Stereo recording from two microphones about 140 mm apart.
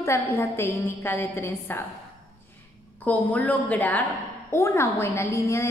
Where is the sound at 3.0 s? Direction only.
10° left (ahead or behind).